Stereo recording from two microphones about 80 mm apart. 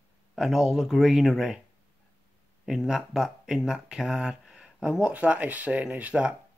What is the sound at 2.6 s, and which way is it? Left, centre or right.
Speech, centre.